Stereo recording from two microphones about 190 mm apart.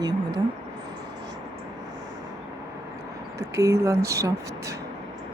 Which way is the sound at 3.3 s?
15° right (ahead or behind).